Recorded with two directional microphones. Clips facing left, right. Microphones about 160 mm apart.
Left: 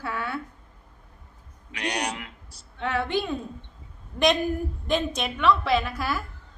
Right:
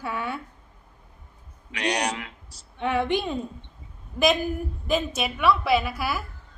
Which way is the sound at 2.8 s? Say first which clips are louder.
Right 2 dB; 15° right (ahead or behind).